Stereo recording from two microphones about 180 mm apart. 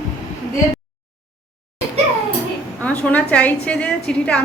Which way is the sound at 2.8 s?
10° left (ahead or behind).